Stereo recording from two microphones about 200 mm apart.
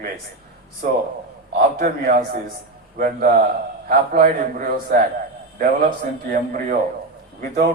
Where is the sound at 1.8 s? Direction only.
40° right (ahead or behind).